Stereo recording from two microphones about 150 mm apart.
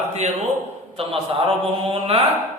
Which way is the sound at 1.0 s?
35° right (ahead or behind).